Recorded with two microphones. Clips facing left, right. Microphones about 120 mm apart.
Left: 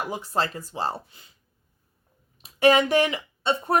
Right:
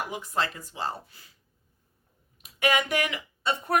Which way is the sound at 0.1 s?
35° left (ahead or behind).